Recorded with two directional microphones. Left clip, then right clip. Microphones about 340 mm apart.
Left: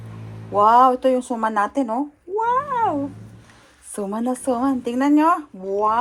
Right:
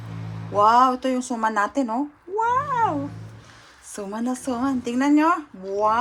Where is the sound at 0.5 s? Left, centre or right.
Centre.